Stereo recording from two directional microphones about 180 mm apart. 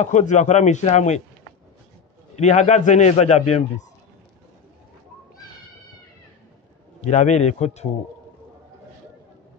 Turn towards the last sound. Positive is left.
turn(degrees=40)  # may be behind; listen again after turning